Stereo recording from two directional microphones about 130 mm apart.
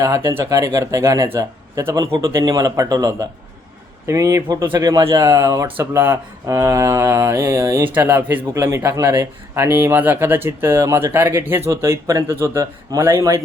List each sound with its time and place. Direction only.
0.0 s speech: 25° right (ahead or behind)
7.9 s speech: 15° right (ahead or behind)